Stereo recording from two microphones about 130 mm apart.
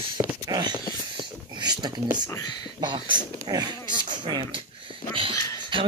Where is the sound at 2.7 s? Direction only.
35° right (ahead or behind).